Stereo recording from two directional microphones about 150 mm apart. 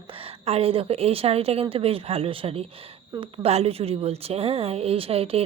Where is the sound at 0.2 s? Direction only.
40° right (ahead or behind).